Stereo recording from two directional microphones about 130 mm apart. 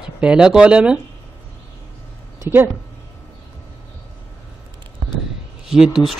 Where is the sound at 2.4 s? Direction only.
15° right (ahead or behind).